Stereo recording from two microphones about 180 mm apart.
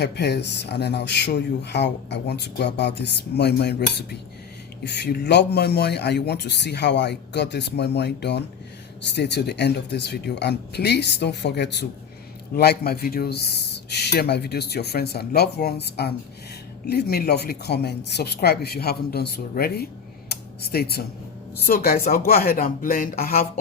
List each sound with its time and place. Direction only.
0.0 s a man's voice: 70° left (ahead or behind)
20.3 s a sound: 60° left (ahead or behind)
21.7 s a man's voice: 55° left (ahead or behind)